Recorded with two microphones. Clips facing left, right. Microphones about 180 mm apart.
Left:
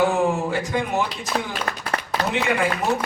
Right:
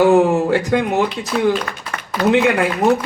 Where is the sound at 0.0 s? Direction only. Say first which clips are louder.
Right 8 dB; 65° right (ahead or behind).